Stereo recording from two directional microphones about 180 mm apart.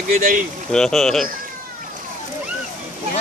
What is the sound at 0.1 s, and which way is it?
Speech, 50° right (ahead or behind).